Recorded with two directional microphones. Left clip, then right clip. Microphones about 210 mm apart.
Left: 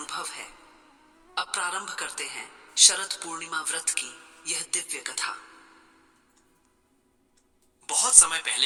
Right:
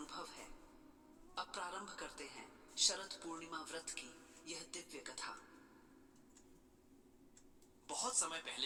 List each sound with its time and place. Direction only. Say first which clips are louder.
0.0 s a sound: left 15 dB; 55° left (ahead or behind)
1.3 s speech: left 16 dB; 55° left (ahead or behind)
7.9 s a man's voice: left 18 dB; 55° left (ahead or behind)